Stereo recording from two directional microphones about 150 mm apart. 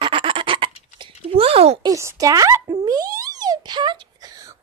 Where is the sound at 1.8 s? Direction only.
20° right (ahead or behind).